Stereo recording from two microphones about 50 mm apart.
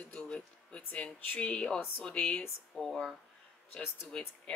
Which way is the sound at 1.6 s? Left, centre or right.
Centre.